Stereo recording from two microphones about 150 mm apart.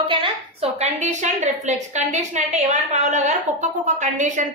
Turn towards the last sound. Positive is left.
turn(degrees=-55)  # may be behind; listen again after turning